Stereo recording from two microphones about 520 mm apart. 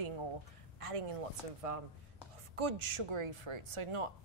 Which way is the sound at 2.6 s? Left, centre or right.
Right.